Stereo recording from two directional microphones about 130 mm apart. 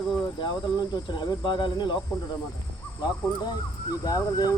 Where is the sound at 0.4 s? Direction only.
35° left (ahead or behind).